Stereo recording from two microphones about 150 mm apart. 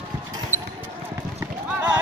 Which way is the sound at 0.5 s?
15° right (ahead or behind).